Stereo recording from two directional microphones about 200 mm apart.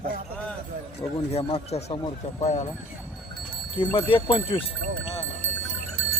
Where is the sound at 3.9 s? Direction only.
25° left (ahead or behind).